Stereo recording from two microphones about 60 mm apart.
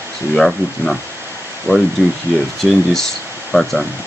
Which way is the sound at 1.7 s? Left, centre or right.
Left.